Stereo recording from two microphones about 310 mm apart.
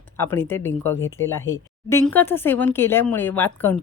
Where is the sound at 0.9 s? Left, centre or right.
Left.